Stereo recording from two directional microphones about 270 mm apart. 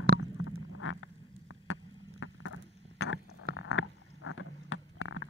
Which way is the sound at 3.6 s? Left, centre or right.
Left.